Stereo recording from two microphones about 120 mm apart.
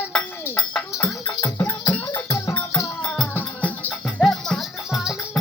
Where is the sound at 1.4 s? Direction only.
30° left (ahead or behind).